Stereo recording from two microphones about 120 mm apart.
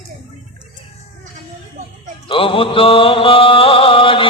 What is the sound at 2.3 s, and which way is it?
Mantra, 50° left (ahead or behind).